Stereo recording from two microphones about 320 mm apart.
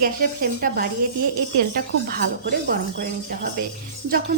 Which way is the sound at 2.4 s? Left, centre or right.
Right.